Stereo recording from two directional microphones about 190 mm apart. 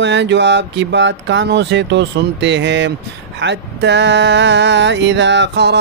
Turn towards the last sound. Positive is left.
turn(degrees=-65)  # may be behind; listen again after turning